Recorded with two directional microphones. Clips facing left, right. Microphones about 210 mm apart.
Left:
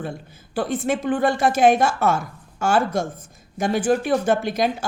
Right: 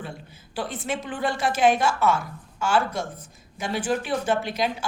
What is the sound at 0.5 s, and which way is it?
A woman's voice, 50° left (ahead or behind).